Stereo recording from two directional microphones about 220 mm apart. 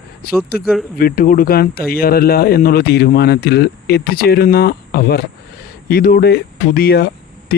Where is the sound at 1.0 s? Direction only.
40° left (ahead or behind).